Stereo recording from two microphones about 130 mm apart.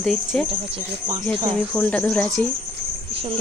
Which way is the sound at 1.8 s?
10° left (ahead or behind).